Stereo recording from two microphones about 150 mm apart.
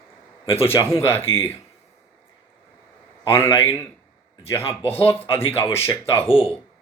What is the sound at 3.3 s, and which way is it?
Speech, 15° left (ahead or behind).